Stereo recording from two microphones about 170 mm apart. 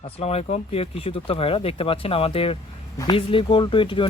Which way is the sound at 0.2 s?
35° left (ahead or behind).